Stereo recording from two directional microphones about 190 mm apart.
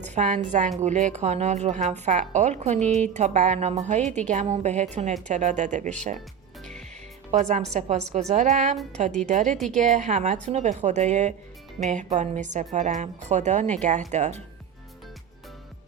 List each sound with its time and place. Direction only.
0.0 s a woman's voice: 40° right (ahead or behind)
7.3 s a woman's voice: 40° right (ahead or behind)